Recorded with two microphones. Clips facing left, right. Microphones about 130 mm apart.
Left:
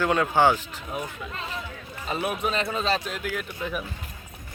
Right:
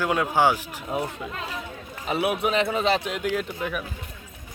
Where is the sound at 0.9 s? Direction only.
25° right (ahead or behind).